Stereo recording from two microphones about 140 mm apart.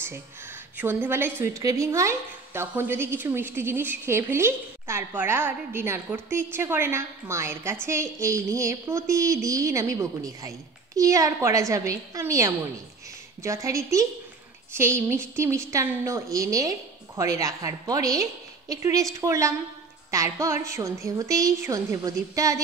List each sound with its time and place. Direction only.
0.7 s a woman's voice: 15° right (ahead or behind)